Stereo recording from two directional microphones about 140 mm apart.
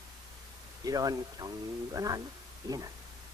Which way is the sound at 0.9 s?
25° right (ahead or behind).